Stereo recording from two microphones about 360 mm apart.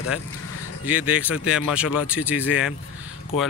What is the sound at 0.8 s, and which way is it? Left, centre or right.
Speech, centre.